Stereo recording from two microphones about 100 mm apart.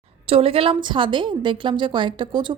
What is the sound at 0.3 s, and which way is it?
A woman's voice, 75° right (ahead or behind).